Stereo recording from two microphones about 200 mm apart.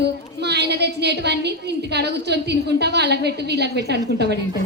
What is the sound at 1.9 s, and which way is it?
A woman's voice, 55° right (ahead or behind).